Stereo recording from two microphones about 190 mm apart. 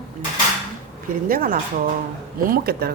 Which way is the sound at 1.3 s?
45° right (ahead or behind).